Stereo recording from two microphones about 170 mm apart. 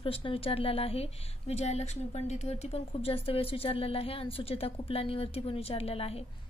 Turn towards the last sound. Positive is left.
turn(degrees=35)  # may be behind; listen again after turning